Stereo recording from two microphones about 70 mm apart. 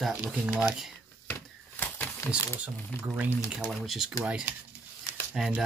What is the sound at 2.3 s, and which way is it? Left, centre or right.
Speech, centre.